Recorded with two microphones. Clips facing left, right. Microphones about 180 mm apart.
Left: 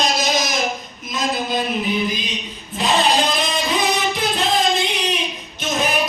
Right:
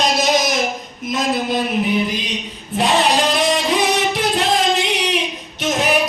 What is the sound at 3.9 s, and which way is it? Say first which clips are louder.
Music: right 3 dB; 85° right.